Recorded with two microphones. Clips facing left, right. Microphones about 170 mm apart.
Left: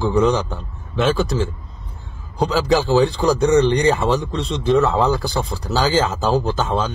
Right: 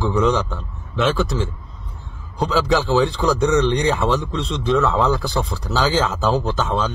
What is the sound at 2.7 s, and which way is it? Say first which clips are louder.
Speech: left 3 dB; centre (ahead or behind).